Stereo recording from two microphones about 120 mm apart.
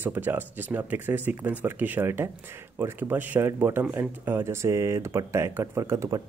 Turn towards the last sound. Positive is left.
turn(degrees=-25)  # may be behind; listen again after turning